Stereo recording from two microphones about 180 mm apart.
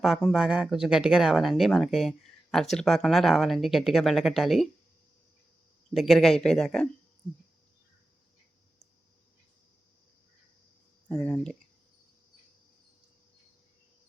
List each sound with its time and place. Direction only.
0.0 s speech: centre (ahead or behind)
5.9 s speech: centre (ahead or behind)
11.1 s speech: 5° left (ahead or behind)